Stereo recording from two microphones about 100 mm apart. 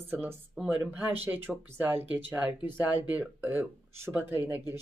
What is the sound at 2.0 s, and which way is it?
A woman's voice, 20° right (ahead or behind).